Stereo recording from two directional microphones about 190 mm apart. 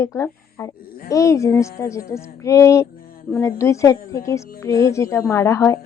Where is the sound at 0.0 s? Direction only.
15° left (ahead or behind).